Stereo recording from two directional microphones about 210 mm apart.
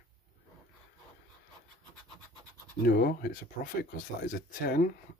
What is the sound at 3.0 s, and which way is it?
Speech, 45° left (ahead or behind).